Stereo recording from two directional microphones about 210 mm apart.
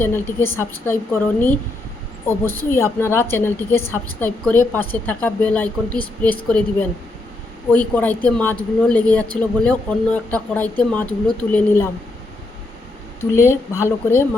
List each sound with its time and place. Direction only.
0.0 s a woman's voice: 10° left (ahead or behind)
2.2 s a woman's voice: 10° left (ahead or behind)
7.7 s a woman's voice: 5° left (ahead or behind)
13.3 s a woman's voice: 15° left (ahead or behind)